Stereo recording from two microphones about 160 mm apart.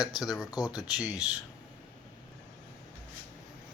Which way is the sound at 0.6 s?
5° right (ahead or behind).